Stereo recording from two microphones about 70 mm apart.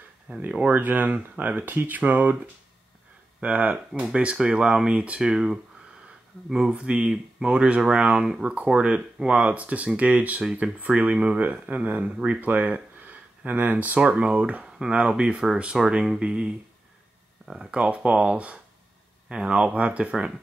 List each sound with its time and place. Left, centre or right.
0.5 s speech: centre
0.7 s speech: right; by 5.6 s centre
6.7 s speech: centre